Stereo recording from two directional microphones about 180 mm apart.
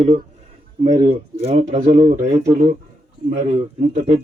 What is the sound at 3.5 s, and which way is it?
Speech, 35° right (ahead or behind).